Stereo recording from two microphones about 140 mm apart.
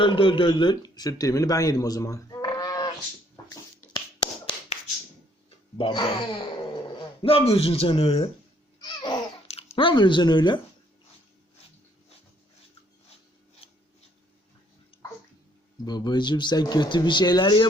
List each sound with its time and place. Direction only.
0.0 s speech: 35° left (ahead or behind)
3.5 s a sound: 25° left (ahead or behind)
5.7 s speech: 35° left (ahead or behind)
7.2 s speech: 40° left (ahead or behind)
8.8 s babbling: 30° left (ahead or behind)
9.5 s speech: 45° left (ahead or behind)
15.8 s speech: 30° left (ahead or behind)